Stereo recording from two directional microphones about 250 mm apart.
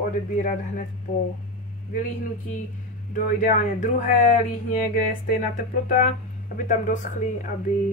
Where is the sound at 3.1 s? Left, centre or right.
Left.